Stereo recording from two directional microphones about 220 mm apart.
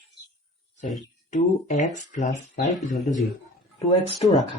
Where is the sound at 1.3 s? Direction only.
35° left (ahead or behind).